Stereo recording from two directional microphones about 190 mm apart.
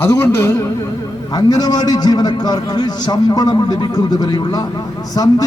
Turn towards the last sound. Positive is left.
turn(degrees=20)  # may be behind; listen again after turning